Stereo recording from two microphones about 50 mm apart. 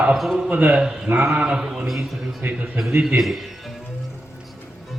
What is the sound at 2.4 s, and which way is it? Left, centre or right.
Speech, right.